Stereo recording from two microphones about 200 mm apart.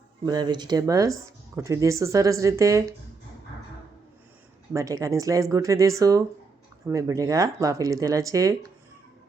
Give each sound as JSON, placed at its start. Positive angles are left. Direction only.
{"t": 0.3, "sound": "speech", "side_deg": -20}
{"t": 4.7, "sound": "speech", "side_deg": -15}